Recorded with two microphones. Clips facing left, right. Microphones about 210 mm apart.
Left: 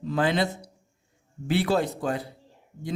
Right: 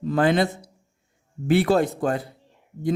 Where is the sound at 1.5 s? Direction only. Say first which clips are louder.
Right 5 dB; 50° right (ahead or behind).